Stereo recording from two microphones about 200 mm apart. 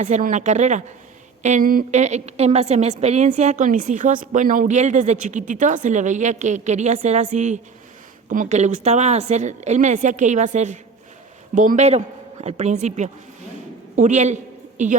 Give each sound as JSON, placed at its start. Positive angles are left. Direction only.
{"t": 0.0, "sound": "a woman's voice", "side_deg": -40}